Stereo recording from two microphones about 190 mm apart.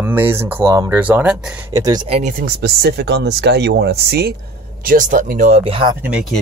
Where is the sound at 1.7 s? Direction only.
20° right (ahead or behind).